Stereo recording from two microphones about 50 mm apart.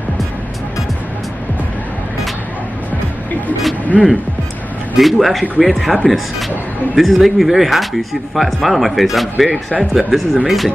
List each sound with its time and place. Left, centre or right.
3.9 s speech: left
4.9 s speech: centre
7.0 s speech: centre